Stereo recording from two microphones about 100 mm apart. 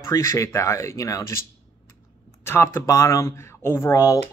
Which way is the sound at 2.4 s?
25° left (ahead or behind).